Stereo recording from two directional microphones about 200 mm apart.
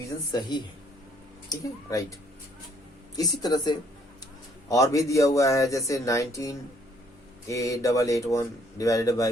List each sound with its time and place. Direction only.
0.3 s speech: 20° left (ahead or behind)
3.2 s speech: 20° left (ahead or behind)